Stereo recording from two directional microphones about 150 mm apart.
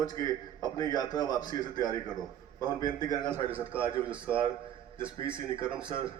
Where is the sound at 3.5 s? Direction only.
10° right (ahead or behind).